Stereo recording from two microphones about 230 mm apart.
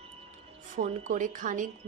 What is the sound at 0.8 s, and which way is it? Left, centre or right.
Speech, right.